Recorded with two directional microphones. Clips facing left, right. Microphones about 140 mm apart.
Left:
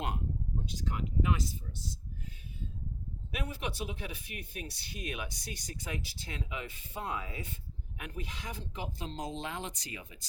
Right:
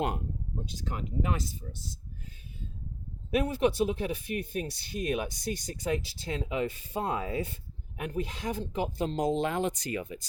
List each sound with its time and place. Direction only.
0.9 s speech: 40° right (ahead or behind)
3.3 s speech: 45° right (ahead or behind)